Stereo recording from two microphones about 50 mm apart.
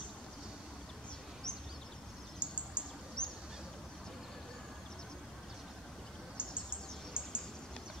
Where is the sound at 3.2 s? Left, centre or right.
Centre.